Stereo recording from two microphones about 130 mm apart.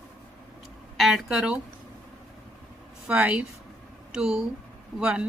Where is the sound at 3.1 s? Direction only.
10° right (ahead or behind).